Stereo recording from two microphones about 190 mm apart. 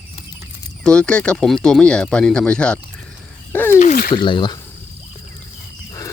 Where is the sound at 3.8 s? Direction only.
45° left (ahead or behind).